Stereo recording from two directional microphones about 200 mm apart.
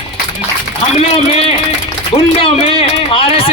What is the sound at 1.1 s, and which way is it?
A man's voice, 30° left (ahead or behind).